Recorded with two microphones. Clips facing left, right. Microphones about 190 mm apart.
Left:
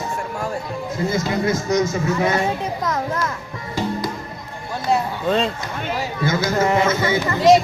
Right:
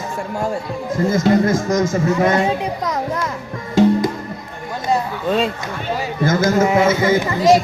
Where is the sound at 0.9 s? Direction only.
50° right (ahead or behind).